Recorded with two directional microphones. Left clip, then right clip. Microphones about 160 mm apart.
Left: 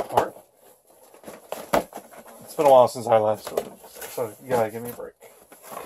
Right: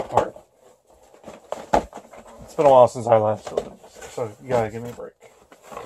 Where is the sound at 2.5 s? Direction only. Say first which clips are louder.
Right 2 dB; 40° right (ahead or behind).